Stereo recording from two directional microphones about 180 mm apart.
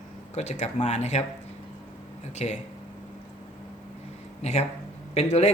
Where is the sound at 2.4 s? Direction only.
35° left (ahead or behind).